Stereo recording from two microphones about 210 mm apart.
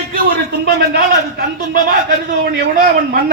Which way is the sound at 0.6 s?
50° right (ahead or behind).